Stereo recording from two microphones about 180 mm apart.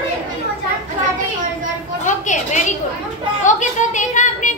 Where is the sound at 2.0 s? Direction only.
45° left (ahead or behind).